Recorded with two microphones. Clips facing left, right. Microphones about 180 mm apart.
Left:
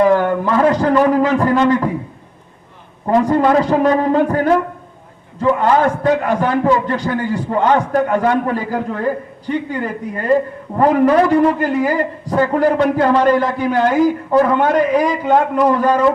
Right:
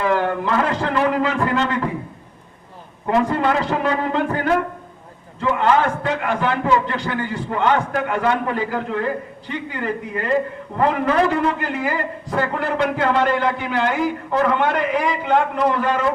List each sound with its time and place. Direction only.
0.0 s a man's voice: 40° left (ahead or behind)
3.1 s a man's voice: 40° left (ahead or behind)